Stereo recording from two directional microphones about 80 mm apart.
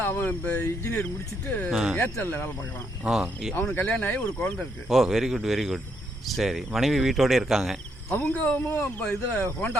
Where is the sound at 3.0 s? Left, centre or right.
Centre.